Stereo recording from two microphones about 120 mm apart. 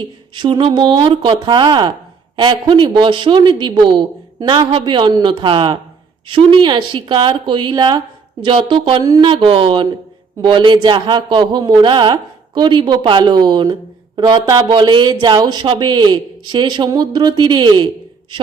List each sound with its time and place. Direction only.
0.3 s speech: 45° right (ahead or behind)